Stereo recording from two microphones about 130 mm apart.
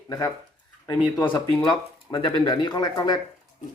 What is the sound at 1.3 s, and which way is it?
Speech, 35° left (ahead or behind).